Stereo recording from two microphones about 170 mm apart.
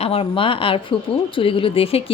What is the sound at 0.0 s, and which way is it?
Speech, 35° left (ahead or behind).